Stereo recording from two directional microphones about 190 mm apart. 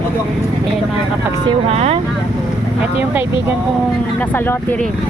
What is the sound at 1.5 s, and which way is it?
Speech, 35° right (ahead or behind).